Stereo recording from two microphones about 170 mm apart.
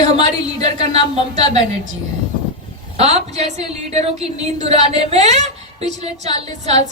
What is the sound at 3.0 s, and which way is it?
A woman's voice, 40° right (ahead or behind).